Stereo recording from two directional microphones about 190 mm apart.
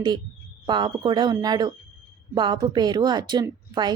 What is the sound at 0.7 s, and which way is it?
Speech, 25° right (ahead or behind).